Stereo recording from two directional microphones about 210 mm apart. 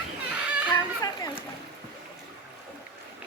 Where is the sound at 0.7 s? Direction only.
20° left (ahead or behind).